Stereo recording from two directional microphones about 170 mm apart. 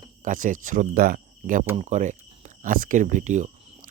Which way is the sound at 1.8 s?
45° right (ahead or behind).